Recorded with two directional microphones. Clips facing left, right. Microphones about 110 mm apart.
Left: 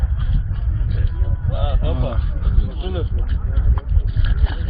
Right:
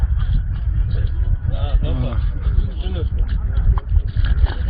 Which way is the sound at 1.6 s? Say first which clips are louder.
Left 1 dB; 30° left (ahead or behind).